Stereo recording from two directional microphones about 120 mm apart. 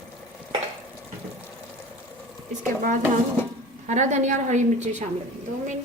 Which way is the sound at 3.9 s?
80° right.